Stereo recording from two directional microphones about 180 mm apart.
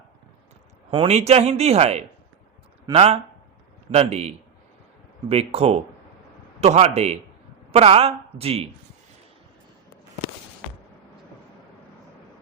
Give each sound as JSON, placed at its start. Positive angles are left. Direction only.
{"t": 0.9, "sound": "speech", "side_deg": -35}
{"t": 5.3, "sound": "speech", "side_deg": -35}